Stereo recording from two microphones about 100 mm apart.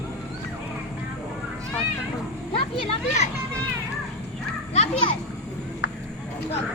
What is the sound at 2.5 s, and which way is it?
Speech, 65° left (ahead or behind).